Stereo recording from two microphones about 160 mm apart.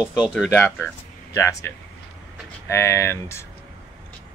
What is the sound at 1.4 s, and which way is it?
Speech, 20° left (ahead or behind).